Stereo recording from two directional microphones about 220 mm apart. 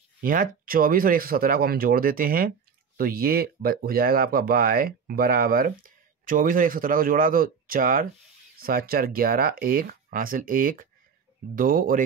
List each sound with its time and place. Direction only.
0.2 s speech: 40° right (ahead or behind)